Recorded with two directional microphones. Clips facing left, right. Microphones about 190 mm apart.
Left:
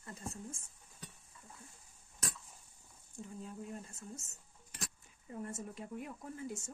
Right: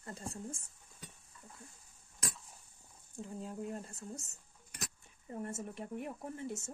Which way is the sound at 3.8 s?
30° right (ahead or behind).